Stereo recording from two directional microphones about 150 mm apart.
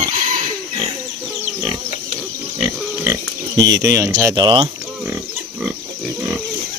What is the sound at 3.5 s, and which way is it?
Speech, 25° right (ahead or behind).